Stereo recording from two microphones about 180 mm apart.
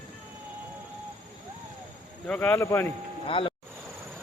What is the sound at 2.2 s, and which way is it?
Speech, 10° left (ahead or behind).